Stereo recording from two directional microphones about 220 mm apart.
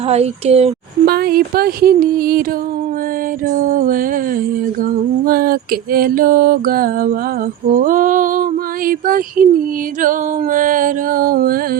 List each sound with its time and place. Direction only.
0.1 s speech: 30° right (ahead or behind)
1.0 s speech: 45° right (ahead or behind)
3.4 s a sound: 40° right (ahead or behind)